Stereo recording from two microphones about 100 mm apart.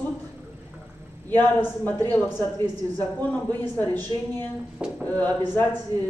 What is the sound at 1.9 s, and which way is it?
A woman's voice, 20° left (ahead or behind).